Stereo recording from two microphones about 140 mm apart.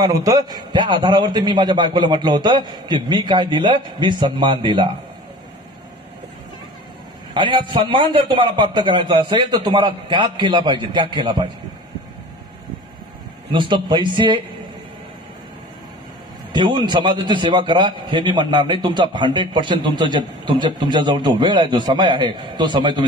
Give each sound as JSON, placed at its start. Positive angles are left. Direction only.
{"t": 0.0, "sound": "a man's voice", "side_deg": -25}
{"t": 7.3, "sound": "a man's voice", "side_deg": -35}
{"t": 13.5, "sound": "a man's voice", "side_deg": -35}
{"t": 16.5, "sound": "a man's voice", "side_deg": -35}